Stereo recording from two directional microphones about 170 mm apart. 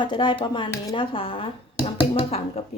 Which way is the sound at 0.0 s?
30° left (ahead or behind).